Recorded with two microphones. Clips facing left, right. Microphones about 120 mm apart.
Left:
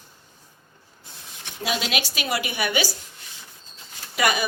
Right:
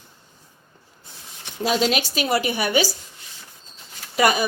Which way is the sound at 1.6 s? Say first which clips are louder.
Right 6 dB; 40° right (ahead or behind).